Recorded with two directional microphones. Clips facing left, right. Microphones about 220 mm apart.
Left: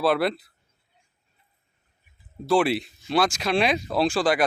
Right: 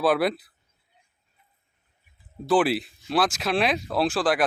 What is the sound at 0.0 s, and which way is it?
Speech, centre (ahead or behind).